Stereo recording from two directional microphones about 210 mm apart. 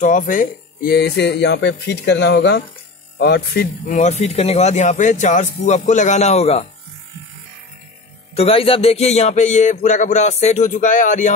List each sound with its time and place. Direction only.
0.0 s speech: 40° left (ahead or behind)
8.4 s speech: 25° left (ahead or behind)